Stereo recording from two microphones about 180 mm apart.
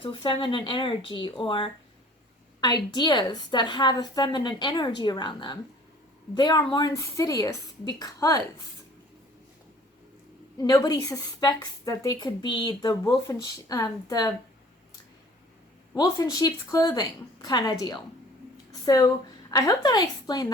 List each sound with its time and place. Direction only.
0.0 s a woman's voice: 25° left (ahead or behind)
10.6 s a woman's voice: 20° left (ahead or behind)
16.0 s a woman's voice: 20° left (ahead or behind)